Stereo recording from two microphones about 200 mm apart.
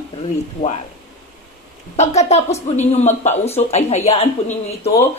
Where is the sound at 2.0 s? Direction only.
35° left (ahead or behind).